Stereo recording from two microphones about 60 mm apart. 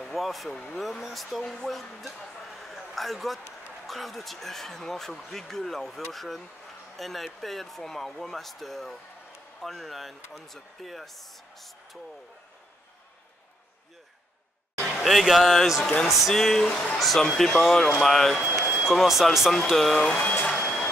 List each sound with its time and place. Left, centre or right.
0.0 s speech: centre
15.0 s speech: centre
18.4 s speech: right
18.9 s speech: centre
20.2 s speech: left
20.5 s vehicle: centre